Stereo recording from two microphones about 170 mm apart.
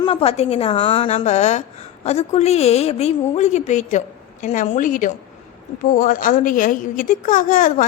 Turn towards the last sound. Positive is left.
turn(degrees=50)  # may be behind; listen again after turning